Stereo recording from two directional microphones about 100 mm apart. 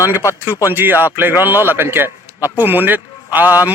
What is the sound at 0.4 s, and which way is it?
A man's voice, 20° right (ahead or behind).